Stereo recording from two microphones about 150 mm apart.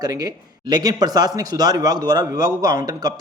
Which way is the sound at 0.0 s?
25° right (ahead or behind).